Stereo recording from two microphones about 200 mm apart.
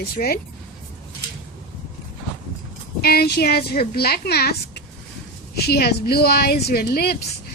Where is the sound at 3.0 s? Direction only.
50° left (ahead or behind).